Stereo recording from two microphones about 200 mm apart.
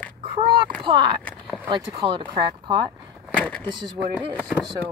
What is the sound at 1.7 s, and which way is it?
Speech, 25° right (ahead or behind).